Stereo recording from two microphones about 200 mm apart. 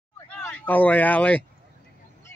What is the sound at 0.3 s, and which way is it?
Speech, 10° left (ahead or behind).